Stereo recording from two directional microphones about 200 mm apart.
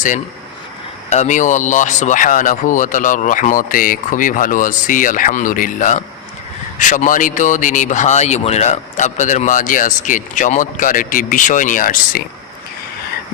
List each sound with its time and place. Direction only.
1.1 s speech: 35° left (ahead or behind)